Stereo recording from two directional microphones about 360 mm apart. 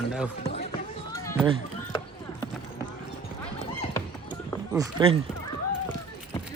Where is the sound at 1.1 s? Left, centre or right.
Centre.